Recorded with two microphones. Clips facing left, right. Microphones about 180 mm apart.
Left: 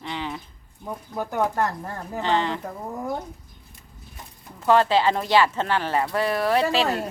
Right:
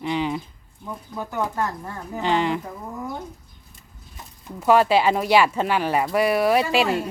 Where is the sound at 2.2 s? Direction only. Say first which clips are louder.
Right 2 dB; 15° right (ahead or behind).